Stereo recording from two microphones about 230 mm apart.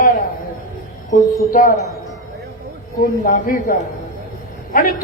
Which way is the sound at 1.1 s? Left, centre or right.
Left.